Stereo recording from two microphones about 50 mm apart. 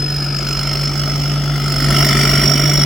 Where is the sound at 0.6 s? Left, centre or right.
Centre.